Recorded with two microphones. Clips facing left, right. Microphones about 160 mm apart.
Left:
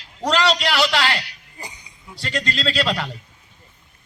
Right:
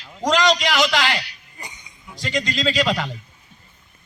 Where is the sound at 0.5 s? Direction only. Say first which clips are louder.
Even; centre (ahead or behind).